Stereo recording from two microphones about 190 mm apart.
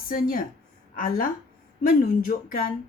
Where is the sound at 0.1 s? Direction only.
50° left (ahead or behind).